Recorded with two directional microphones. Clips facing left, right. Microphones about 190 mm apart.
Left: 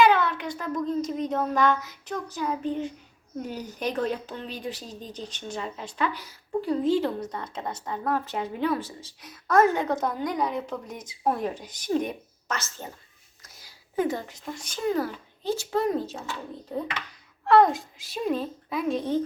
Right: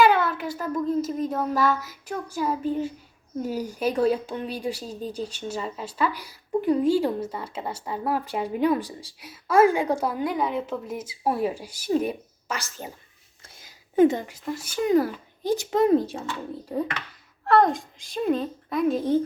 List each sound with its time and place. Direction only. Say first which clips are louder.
0.0 s child singing: right 1 dB; 10° right (ahead or behind)
3.5 s a woman's voice: right 4 dB; 10° right (ahead or behind)
13.4 s a sound: right 2 dB; 25° right (ahead or behind)
14.3 s a woman's voice: right 6 dB; 5° right (ahead or behind)
15.4 s speech: right 5 dB; 20° right (ahead or behind)
17.4 s a child's voice: left 1 dB; centre (ahead or behind)